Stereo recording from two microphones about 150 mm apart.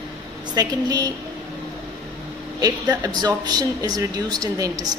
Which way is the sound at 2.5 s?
25° right (ahead or behind).